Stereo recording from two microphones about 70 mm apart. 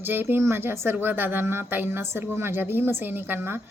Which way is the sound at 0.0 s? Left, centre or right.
Right.